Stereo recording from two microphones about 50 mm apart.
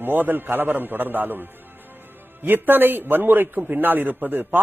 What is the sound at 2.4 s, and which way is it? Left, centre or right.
A man's voice, right.